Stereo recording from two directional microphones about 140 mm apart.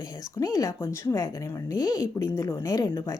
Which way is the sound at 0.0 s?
25° left (ahead or behind).